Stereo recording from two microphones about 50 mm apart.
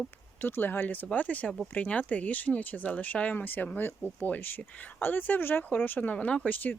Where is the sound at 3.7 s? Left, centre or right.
Left.